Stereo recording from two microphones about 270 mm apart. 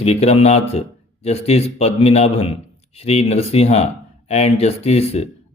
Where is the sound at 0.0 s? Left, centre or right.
Left.